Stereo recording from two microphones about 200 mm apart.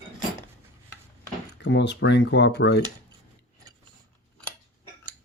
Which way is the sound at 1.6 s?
60° left (ahead or behind).